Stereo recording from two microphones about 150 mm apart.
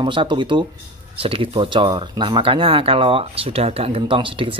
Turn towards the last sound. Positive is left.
turn(degrees=-35)  # may be behind; listen again after turning